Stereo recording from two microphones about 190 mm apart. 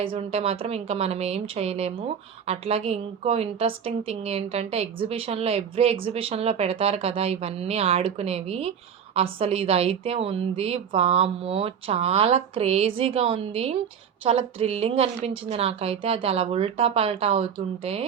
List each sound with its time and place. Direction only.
0.0 s a woman's voice: 30° right (ahead or behind)